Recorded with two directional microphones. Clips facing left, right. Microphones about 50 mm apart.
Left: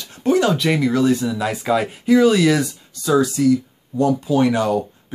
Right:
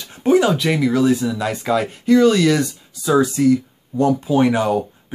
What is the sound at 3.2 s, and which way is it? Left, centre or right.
Speech, right.